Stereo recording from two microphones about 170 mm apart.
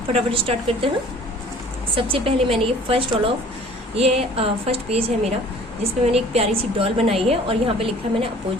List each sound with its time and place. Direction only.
0.1 s a woman's voice: 35° right (ahead or behind)
2.0 s a woman's voice: 35° right (ahead or behind)